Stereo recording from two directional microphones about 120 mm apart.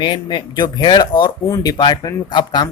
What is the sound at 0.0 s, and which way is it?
Speech, 40° left (ahead or behind).